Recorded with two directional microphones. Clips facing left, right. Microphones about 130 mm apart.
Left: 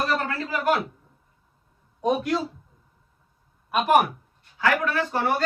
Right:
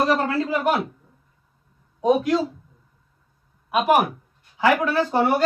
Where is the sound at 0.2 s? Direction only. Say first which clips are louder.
Right 6 dB; 25° right (ahead or behind).